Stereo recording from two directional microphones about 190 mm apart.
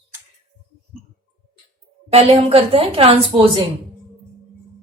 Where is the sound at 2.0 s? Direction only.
35° right (ahead or behind).